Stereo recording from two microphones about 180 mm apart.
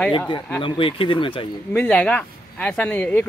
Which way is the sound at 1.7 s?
10° left (ahead or behind).